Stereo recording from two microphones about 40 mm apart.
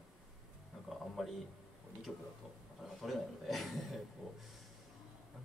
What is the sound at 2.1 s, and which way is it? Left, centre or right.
Speech, centre.